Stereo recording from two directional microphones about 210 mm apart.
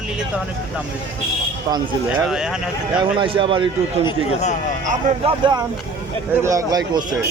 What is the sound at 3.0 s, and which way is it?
Speech, 25° right (ahead or behind).